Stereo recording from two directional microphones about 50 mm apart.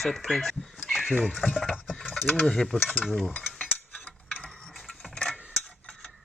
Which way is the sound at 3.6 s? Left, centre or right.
Left.